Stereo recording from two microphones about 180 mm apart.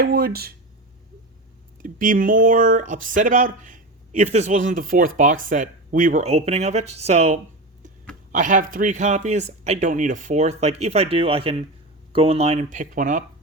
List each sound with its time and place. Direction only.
0.0 s speech: 55° right (ahead or behind)
1.8 s speech: 50° right (ahead or behind)